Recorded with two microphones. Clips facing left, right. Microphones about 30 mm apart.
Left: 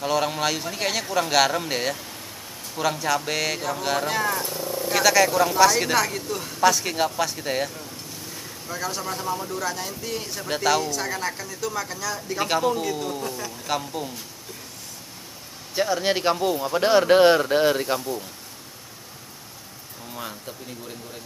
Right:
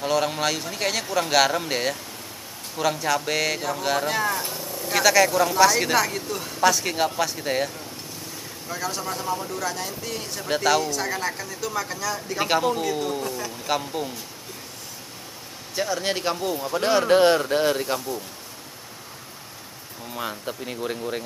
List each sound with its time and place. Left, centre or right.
0.0 s speech: centre
15.7 s speech: centre
20.2 s speech: centre
20.6 s speech: right